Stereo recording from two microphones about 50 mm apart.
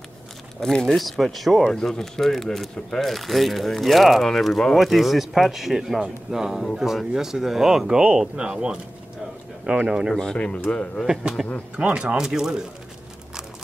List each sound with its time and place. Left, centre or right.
0.6 s speech: centre
0.9 s speech: centre
1.7 s speech: centre
5.9 s speech: centre
10.1 s speech: centre
11.7 s speech: right
12.2 s speech: centre